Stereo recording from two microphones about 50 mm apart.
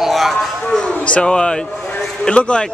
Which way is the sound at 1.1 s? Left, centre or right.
Centre.